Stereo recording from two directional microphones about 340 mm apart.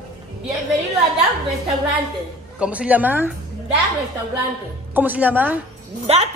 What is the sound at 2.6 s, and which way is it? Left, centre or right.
Speech, centre.